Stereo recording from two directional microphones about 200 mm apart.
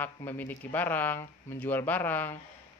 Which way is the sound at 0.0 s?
10° left (ahead or behind).